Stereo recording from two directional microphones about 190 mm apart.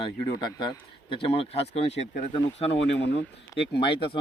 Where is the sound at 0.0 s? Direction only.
25° left (ahead or behind).